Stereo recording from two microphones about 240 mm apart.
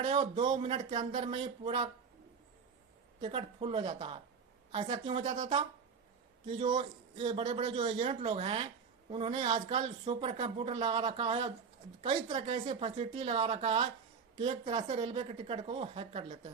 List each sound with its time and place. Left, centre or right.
0.0 s a man's voice: right
3.2 s a man's voice: right